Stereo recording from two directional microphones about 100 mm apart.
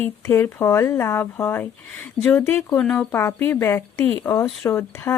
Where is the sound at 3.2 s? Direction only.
25° left (ahead or behind).